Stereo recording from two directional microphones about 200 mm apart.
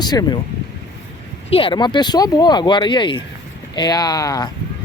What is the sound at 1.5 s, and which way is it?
Speech, 25° left (ahead or behind).